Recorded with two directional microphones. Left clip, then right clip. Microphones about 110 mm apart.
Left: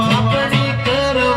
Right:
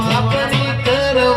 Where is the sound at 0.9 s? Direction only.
15° right (ahead or behind).